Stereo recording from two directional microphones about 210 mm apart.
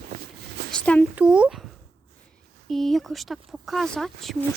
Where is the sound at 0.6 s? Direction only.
5° left (ahead or behind).